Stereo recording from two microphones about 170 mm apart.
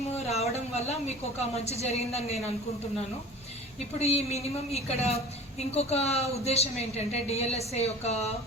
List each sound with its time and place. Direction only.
0.3 s a sound: 40° left (ahead or behind)
1.5 s a woman's voice: 40° left (ahead or behind)
4.0 s a woman's voice: 40° left (ahead or behind)